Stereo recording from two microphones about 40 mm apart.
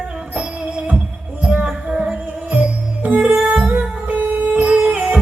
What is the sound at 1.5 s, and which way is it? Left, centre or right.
Music, right.